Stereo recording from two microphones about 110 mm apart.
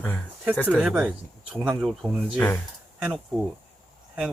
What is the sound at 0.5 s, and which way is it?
Speech, 10° left (ahead or behind).